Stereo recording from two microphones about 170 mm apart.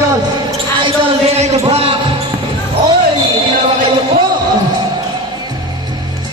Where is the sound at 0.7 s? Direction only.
35° right (ahead or behind).